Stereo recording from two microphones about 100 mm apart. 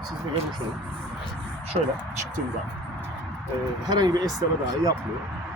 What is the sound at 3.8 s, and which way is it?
Speech, 40° right (ahead or behind).